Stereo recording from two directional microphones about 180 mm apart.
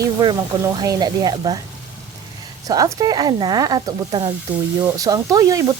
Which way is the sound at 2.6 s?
20° right (ahead or behind).